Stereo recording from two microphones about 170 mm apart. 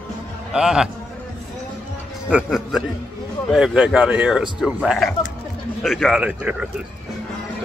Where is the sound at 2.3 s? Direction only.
5° right (ahead or behind).